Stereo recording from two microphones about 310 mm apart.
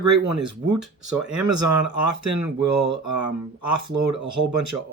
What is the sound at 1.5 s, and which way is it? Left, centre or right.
Speech, right.